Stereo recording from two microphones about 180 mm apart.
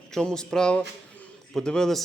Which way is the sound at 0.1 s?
5° left (ahead or behind).